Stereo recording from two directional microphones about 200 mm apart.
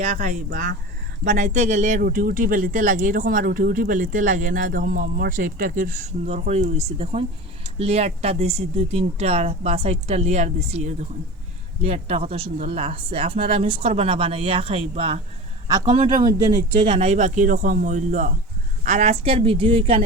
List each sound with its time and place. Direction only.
0.0 s speech: 35° right (ahead or behind)
16.4 s speech: 30° right (ahead or behind)